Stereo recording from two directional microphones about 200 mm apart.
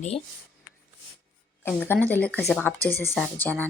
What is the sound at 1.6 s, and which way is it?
Speech, 10° left (ahead or behind).